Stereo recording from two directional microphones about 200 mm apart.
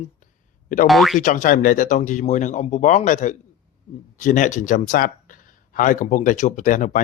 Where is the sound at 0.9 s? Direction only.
Centre (ahead or behind).